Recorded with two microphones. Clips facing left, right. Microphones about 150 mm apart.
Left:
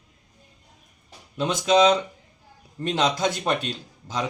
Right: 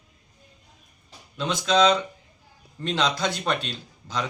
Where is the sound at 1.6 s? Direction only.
20° left (ahead or behind).